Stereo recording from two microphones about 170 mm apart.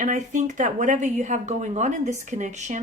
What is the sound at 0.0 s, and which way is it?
Speech, 45° right (ahead or behind).